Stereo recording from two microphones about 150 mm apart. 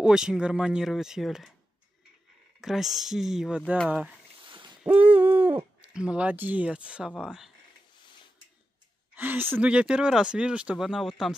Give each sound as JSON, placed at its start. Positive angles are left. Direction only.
{"t": 0.0, "sound": "speech", "side_deg": -5}
{"t": 2.6, "sound": "speech", "side_deg": 0}
{"t": 4.5, "sound": "owl", "side_deg": -30}
{"t": 4.8, "sound": "speech", "side_deg": -10}
{"t": 9.1, "sound": "speech", "side_deg": -10}